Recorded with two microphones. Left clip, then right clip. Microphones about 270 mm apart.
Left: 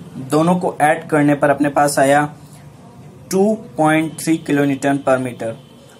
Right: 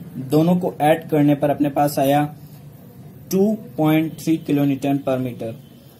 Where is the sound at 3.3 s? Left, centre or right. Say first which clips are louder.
Left 4 dB; centre.